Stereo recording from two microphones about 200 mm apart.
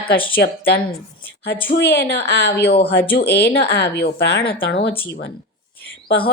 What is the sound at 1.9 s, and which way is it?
A woman's voice, 65° left (ahead or behind).